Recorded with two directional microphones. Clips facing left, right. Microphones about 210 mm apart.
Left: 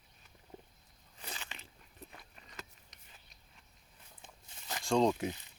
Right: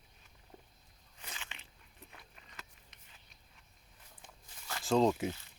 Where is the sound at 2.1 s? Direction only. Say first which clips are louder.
Left 1 dB; 40° left (ahead or behind).